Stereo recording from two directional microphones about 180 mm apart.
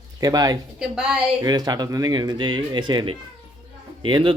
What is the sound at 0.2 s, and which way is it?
Speech, 20° right (ahead or behind).